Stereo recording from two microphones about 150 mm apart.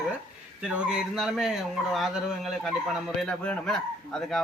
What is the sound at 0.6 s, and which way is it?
A man's voice, 5° right (ahead or behind).